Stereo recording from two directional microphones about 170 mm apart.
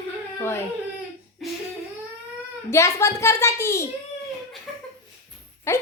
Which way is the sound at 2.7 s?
15° left (ahead or behind).